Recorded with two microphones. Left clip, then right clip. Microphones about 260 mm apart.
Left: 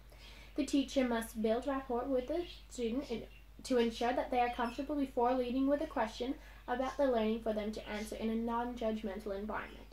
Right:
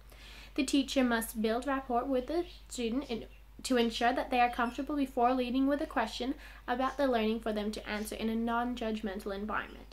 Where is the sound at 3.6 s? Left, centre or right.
Right.